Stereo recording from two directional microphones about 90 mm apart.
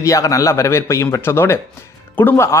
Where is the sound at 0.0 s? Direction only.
35° left (ahead or behind).